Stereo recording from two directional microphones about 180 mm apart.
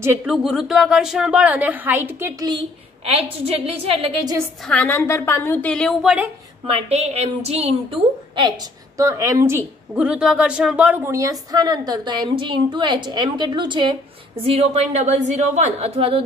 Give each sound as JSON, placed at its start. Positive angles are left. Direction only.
{"t": 0.3, "sound": "a woman's voice", "side_deg": 0}
{"t": 3.1, "sound": "a woman's voice", "side_deg": -35}
{"t": 4.6, "sound": "a woman's voice", "side_deg": 10}
{"t": 6.7, "sound": "a woman's voice", "side_deg": -35}